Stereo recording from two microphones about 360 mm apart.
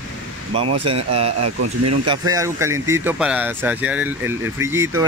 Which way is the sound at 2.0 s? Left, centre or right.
Centre.